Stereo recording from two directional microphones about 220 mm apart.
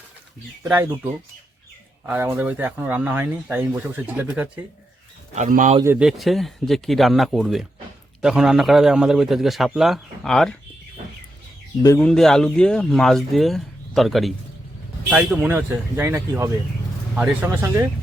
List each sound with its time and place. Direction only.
0.6 s speech: 10° right (ahead or behind)
5.3 s speech: 35° right (ahead or behind)
5.8 s speech: 5° right (ahead or behind)
11.9 s speech: 5° left (ahead or behind)